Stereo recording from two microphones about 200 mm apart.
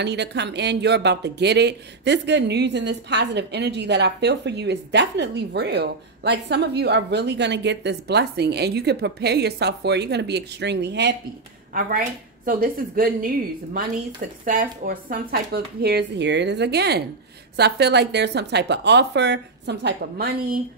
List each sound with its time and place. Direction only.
0.0 s speech: 60° right (ahead or behind)
11.7 s speech: 45° right (ahead or behind)
14.4 s speech: 45° right (ahead or behind)